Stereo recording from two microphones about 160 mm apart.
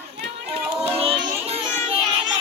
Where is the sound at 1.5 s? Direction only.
35° right (ahead or behind).